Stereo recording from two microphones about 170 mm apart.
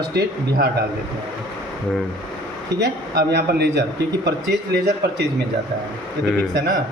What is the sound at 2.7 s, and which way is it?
Speech, 85° right.